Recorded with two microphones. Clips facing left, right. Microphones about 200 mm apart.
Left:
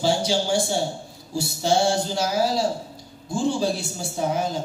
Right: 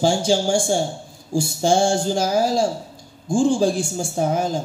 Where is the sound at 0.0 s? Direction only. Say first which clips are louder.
Right 4 dB; 50° right (ahead or behind).